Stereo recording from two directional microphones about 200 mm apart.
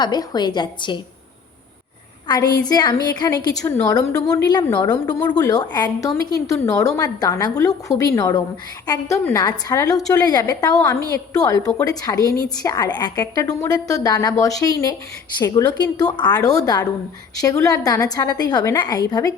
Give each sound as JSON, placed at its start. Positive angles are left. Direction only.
{"t": 0.0, "sound": "a woman's voice", "side_deg": 20}
{"t": 2.2, "sound": "a woman's voice", "side_deg": 20}
{"t": 11.6, "sound": "a woman's voice", "side_deg": 5}
{"t": 11.9, "sound": "a woman's voice", "side_deg": 15}